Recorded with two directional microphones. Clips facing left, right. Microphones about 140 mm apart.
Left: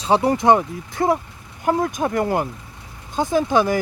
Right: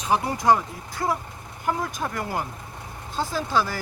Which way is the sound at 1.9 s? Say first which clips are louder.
Left 8 dB; 25° left (ahead or behind).